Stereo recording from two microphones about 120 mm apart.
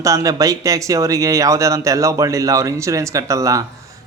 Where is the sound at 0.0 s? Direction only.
30° right (ahead or behind).